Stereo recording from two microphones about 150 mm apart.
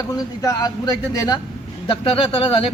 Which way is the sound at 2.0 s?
35° left (ahead or behind).